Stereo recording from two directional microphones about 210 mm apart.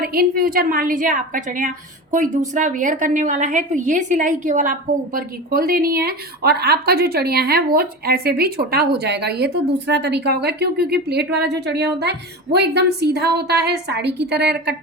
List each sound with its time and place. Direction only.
0.0 s a woman's voice: 45° right (ahead or behind)